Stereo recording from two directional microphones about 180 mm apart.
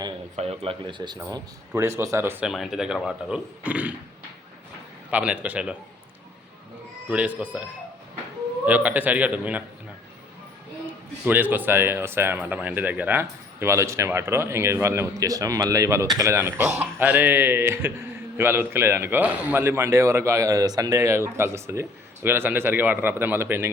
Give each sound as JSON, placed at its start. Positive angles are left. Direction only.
{"t": 0.3, "sound": "speech", "side_deg": -35}
{"t": 2.5, "sound": "speech", "side_deg": 0}
{"t": 5.1, "sound": "speech", "side_deg": -5}
{"t": 7.1, "sound": "speech", "side_deg": -5}
{"t": 11.3, "sound": "speech", "side_deg": -10}